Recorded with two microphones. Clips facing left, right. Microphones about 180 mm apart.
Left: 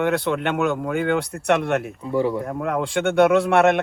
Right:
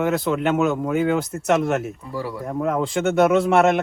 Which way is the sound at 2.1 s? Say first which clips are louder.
Left 9 dB; 20° left (ahead or behind).